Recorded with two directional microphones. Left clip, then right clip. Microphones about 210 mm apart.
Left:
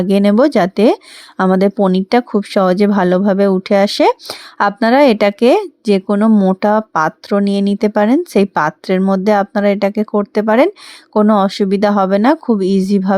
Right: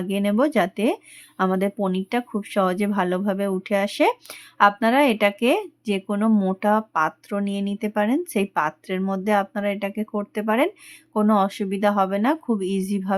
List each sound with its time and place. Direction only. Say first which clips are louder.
0.0 s speech: left 10 dB; 35° left (ahead or behind)